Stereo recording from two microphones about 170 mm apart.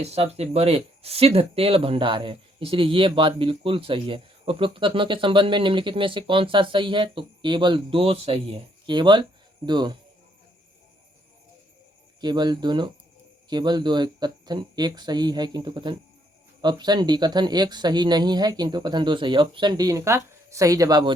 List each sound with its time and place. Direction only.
0.0 s speech: 35° right (ahead or behind)
12.2 s speech: 25° right (ahead or behind)